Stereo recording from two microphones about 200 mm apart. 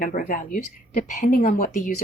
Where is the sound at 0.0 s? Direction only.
40° left (ahead or behind).